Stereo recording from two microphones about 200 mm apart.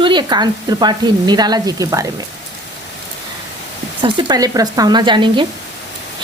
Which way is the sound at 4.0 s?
20° right (ahead or behind).